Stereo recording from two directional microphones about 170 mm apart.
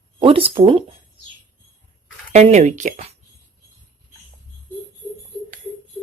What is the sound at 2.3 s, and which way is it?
Speech, 40° right (ahead or behind).